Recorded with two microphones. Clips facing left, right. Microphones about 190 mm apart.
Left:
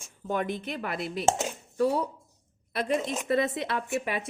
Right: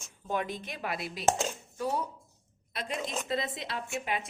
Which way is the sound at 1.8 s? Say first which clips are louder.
Left 7 dB; 65° left (ahead or behind).